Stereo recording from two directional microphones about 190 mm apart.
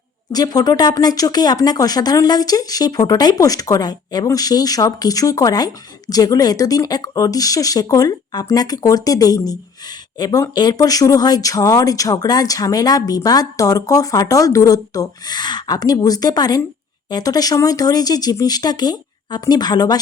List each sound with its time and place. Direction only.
0.3 s speech: 20° left (ahead or behind)